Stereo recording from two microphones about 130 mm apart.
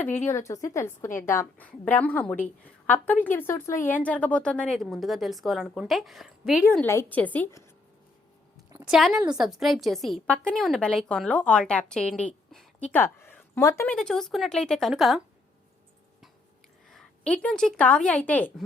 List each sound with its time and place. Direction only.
0.0 s a woman's voice: 15° left (ahead or behind); by 6.7 s 5° right (ahead or behind)
6.8 s a woman's voice: 15° left (ahead or behind)
8.8 s a woman's voice: centre (ahead or behind)
12.5 s a sound: centre (ahead or behind)
12.9 s speech: 15° left (ahead or behind)
13.8 s a woman's voice: 5° left (ahead or behind)
16.9 s a woman's voice: 5° left (ahead or behind)